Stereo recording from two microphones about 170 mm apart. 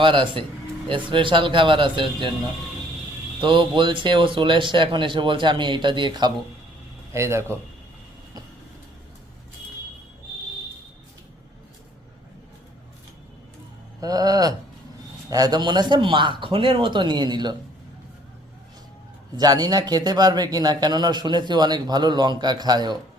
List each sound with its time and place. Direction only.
0.0 s speech: 30° right (ahead or behind)
3.4 s speech: 30° right (ahead or behind)
7.1 s a man's voice: 15° right (ahead or behind)
14.0 s speech: 20° right (ahead or behind)
19.4 s speech: 25° right (ahead or behind)